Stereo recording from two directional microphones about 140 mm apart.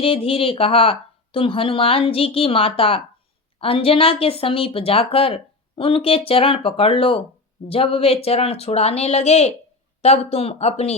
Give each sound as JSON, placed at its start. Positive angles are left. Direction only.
{"t": 0.0, "sound": "speech", "side_deg": 40}